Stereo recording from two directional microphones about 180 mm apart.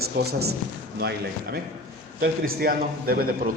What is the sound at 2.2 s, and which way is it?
A man's voice, 55° right (ahead or behind).